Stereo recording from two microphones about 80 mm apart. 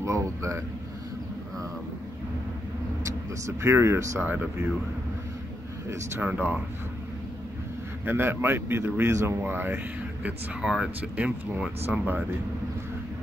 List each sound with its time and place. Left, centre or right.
0.0 s speech: right
3.0 s speech: right
4.3 s a man's voice: right
6.2 s a man's voice: right
8.0 s a man's voice: right
10.2 s speech: centre